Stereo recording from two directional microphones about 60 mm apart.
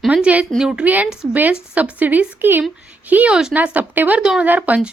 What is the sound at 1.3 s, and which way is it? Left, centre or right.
A woman's voice, right.